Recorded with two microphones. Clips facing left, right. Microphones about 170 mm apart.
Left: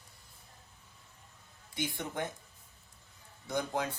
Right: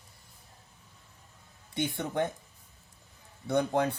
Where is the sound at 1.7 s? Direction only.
60° right (ahead or behind).